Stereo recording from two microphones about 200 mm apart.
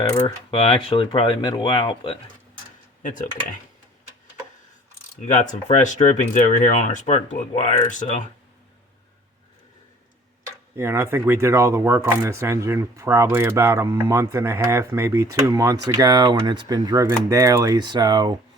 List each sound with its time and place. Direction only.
0.3 s speech: 30° left (ahead or behind)
3.0 s speech: 40° left (ahead or behind)
5.2 s speech: 35° left (ahead or behind)
10.4 s speech: 15° right (ahead or behind)